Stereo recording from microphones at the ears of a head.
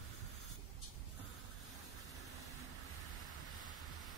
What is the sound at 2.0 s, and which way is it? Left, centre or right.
Vehicle, right.